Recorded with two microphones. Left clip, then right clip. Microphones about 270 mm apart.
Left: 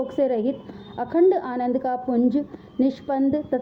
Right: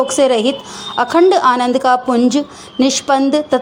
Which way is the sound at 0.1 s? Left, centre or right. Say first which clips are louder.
Right 10 dB; right.